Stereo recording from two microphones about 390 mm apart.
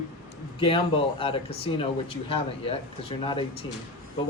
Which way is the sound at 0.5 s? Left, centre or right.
Centre.